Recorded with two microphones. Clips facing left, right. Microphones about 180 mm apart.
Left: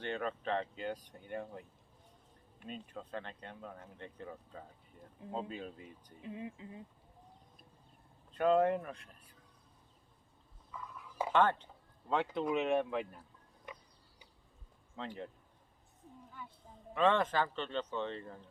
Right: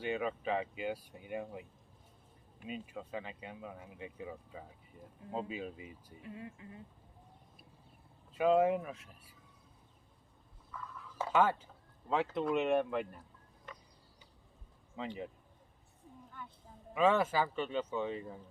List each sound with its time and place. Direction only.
0.0 s speech: 5° right (ahead or behind)
6.2 s speech: 20° left (ahead or behind)
8.3 s speech: 5° right (ahead or behind)
10.7 s a sound: 15° left (ahead or behind)
11.3 s speech: 5° right (ahead or behind)
14.9 s speech: 5° right (ahead or behind)
16.9 s speech: 5° right (ahead or behind)